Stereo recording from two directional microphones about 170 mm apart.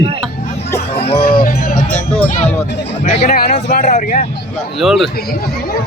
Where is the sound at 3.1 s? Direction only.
40° left (ahead or behind).